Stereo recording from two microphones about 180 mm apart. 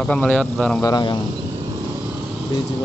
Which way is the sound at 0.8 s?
25° left (ahead or behind).